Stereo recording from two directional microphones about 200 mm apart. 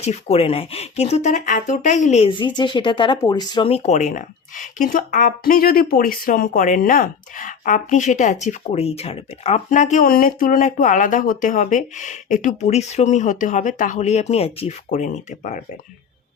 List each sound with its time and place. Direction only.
0.0 s speech: 30° left (ahead or behind)